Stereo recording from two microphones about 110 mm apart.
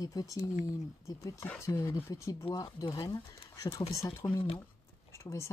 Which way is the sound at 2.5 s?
35° left (ahead or behind).